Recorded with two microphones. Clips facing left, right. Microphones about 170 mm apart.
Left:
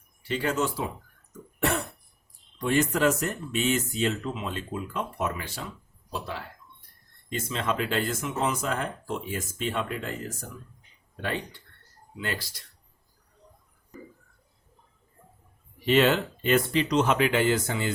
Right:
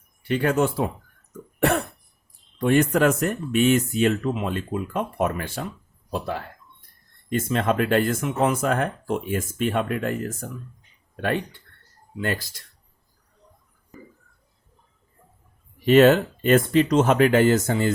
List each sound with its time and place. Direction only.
0.3 s speech: 55° right (ahead or behind)
1.5 s cough: 55° right (ahead or behind)
2.6 s speech: 55° right (ahead or behind)
15.9 s speech: 50° right (ahead or behind)